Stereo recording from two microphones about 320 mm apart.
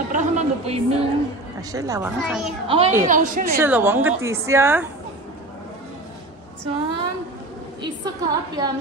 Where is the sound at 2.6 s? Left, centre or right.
Centre.